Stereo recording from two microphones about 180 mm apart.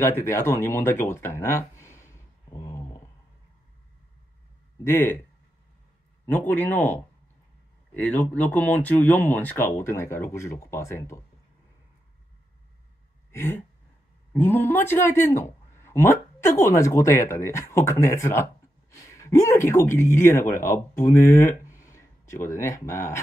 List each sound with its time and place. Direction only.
0.2 s speech: 15° left (ahead or behind)
4.8 s speech: 15° left (ahead or behind)
6.2 s speech: 10° left (ahead or behind)
13.3 s a sound: 15° left (ahead or behind)
14.3 s speech: 10° left (ahead or behind)